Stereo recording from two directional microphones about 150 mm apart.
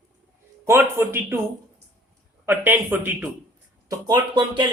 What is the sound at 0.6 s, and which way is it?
Speech, 15° right (ahead or behind).